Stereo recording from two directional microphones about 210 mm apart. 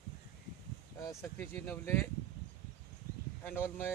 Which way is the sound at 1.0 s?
10° left (ahead or behind).